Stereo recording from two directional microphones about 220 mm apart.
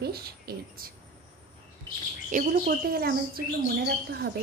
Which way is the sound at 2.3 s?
40° right (ahead or behind).